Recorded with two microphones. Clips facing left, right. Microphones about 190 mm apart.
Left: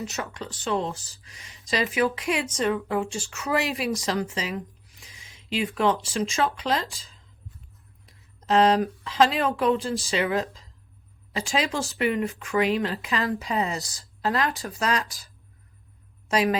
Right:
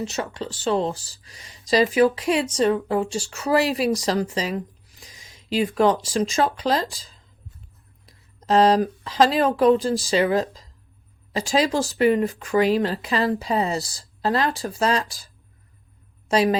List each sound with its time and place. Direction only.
0.0 s speech: 25° right (ahead or behind)
16.3 s speech: 30° right (ahead or behind)